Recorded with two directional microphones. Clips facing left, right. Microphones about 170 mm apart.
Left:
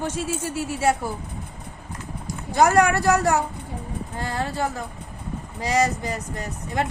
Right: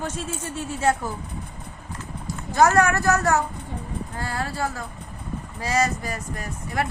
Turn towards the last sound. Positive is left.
turn(degrees=20)  # may be behind; listen again after turning